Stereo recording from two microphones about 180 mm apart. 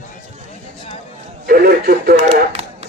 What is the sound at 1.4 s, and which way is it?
Speech, 55° right (ahead or behind).